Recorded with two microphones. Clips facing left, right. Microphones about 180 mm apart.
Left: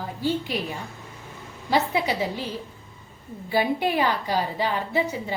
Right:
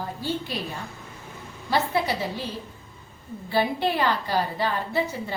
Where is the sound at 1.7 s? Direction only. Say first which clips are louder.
Left 1 dB; 15° left (ahead or behind).